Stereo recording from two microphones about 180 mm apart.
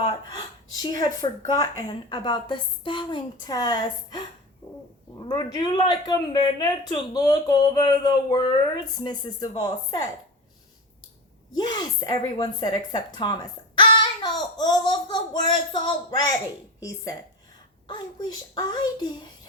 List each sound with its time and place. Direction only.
0.1 s gasp: 25° left (ahead or behind)
1.5 s a man's voice: 20° left (ahead or behind)
11.5 s a man's voice: 25° left (ahead or behind)